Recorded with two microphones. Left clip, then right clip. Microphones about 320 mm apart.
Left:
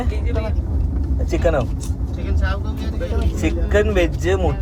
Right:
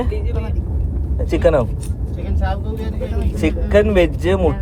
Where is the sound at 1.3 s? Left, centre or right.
Right.